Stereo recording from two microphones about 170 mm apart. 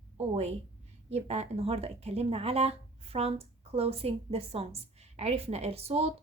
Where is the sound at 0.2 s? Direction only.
40° right (ahead or behind).